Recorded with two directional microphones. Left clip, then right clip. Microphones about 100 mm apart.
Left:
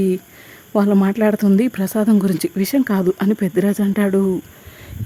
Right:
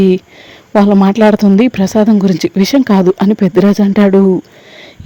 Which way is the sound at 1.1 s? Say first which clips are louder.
Right 8 dB; 40° right (ahead or behind).